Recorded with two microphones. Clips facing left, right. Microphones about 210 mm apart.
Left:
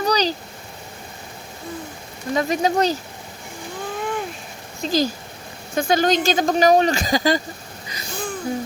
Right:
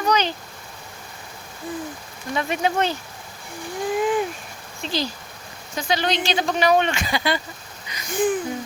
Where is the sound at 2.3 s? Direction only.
35° left (ahead or behind).